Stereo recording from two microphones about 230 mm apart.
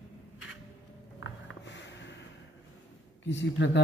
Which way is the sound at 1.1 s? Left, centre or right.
Left.